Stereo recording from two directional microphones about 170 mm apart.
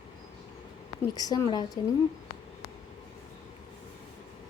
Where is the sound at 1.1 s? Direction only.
20° left (ahead or behind).